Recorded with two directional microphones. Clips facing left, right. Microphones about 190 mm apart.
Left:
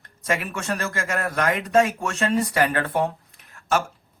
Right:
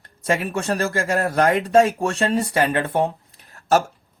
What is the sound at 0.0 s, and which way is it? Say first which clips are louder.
Speech: right 4 dB; 30° right (ahead or behind).